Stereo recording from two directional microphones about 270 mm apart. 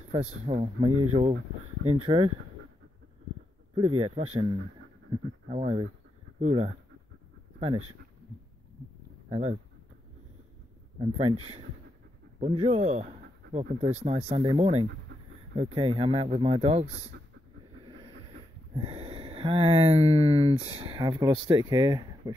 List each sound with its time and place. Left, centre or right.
0.1 s speech: right
3.7 s speech: centre
9.3 s speech: right
11.0 s speech: centre
12.4 s speech: right
18.8 s speech: right